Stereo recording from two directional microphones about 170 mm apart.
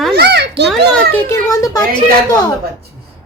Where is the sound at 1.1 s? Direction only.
15° left (ahead or behind).